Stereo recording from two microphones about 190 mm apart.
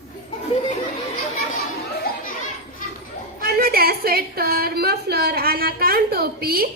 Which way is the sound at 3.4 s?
55° right (ahead or behind).